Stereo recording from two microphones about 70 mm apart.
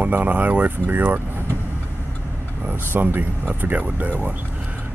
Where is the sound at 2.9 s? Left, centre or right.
Right.